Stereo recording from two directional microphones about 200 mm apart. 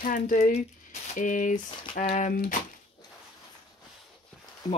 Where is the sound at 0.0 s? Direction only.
40° left (ahead or behind).